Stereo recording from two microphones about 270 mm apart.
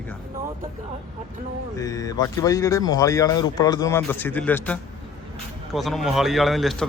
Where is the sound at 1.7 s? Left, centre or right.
Centre.